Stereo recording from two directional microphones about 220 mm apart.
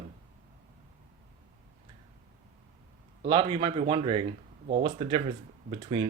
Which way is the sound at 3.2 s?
25° right (ahead or behind).